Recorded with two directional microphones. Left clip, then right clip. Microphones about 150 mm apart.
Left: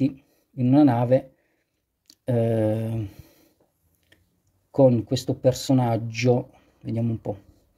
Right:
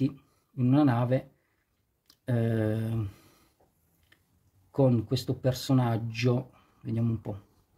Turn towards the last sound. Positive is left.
turn(degrees=20)  # may be behind; listen again after turning